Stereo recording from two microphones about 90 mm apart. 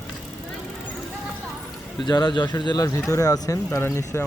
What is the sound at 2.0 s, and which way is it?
Speech, 55° left (ahead or behind).